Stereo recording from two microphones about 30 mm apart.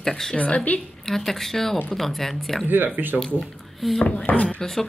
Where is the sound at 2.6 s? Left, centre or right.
Right.